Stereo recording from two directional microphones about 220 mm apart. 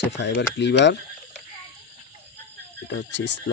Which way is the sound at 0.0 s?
55° left (ahead or behind).